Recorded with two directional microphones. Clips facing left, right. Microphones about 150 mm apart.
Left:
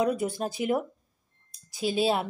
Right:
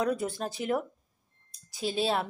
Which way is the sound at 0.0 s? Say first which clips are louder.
Left 3 dB; 10° left (ahead or behind).